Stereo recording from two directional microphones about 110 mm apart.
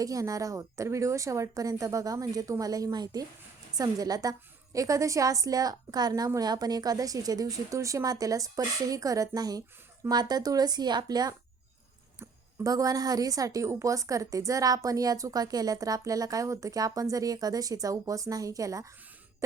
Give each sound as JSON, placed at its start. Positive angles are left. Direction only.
{"t": 0.0, "sound": "a woman's voice", "side_deg": -30}